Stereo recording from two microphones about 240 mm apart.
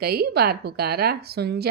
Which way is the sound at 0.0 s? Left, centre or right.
Right.